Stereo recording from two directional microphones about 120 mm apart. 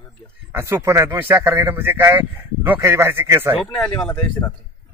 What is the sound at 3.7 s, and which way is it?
Speech, 15° left (ahead or behind).